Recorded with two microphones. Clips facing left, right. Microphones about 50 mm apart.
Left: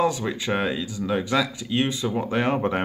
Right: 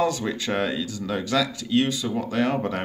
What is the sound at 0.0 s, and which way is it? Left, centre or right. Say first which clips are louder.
Speech: left 1 dB; centre.